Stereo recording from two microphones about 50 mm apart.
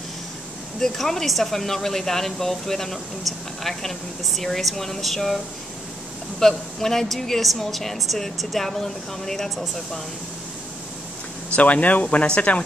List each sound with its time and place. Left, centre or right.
0.7 s speech: centre
6.4 s a woman's voice: centre
11.5 s speech: left